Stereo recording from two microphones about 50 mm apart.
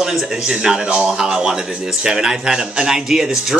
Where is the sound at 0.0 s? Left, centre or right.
Centre.